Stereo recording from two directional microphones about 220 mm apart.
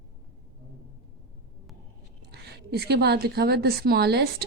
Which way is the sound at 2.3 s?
50° right (ahead or behind).